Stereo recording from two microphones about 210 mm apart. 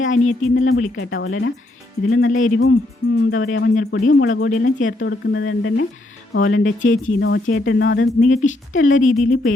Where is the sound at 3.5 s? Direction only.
60° left (ahead or behind).